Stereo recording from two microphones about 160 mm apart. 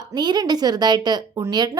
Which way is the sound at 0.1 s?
25° right (ahead or behind).